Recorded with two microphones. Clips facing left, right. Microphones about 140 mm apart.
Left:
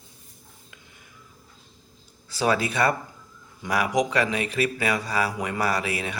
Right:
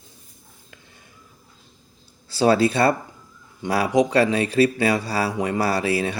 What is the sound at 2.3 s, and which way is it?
Speech, 30° right (ahead or behind).